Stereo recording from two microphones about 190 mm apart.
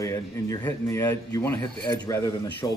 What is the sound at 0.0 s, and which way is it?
Speech, 15° left (ahead or behind).